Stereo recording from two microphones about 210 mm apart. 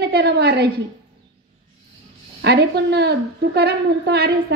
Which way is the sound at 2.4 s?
50° right (ahead or behind).